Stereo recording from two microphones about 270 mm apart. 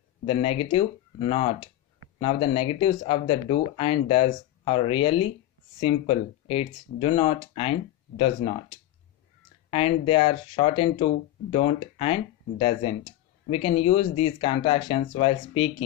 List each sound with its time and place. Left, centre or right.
0.3 s speech: left
9.7 s speech: left